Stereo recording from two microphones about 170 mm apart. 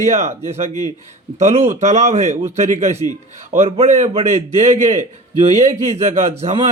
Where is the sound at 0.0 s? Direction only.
45° right (ahead or behind).